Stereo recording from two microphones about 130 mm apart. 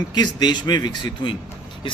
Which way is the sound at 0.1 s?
35° left (ahead or behind).